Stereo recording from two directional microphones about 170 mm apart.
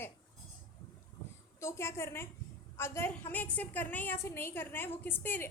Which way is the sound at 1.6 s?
15° left (ahead or behind).